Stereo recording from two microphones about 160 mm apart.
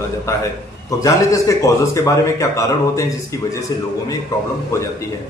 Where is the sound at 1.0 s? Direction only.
20° left (ahead or behind).